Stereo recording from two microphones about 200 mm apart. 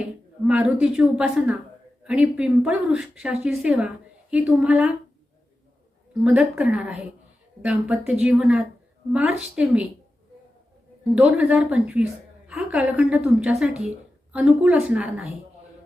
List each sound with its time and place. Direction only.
0.4 s speech: 5° right (ahead or behind)
6.2 s a woman's voice: 5° right (ahead or behind)
11.1 s a woman's voice: 5° right (ahead or behind)